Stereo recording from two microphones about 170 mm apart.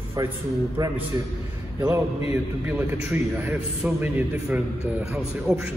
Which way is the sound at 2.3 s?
10° right (ahead or behind).